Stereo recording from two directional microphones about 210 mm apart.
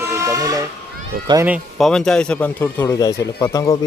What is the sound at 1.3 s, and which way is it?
Speech, 10° right (ahead or behind).